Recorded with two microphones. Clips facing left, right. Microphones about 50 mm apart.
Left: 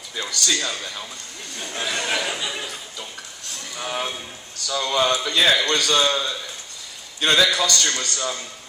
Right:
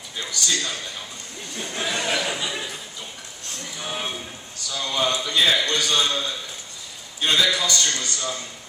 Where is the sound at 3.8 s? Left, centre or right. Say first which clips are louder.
Left 3 dB; left.